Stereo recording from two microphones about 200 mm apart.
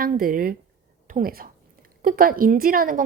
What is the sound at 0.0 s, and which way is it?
A woman's voice, 45° right (ahead or behind).